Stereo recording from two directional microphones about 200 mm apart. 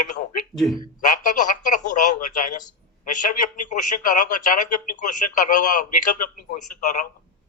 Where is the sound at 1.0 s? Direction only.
40° left (ahead or behind).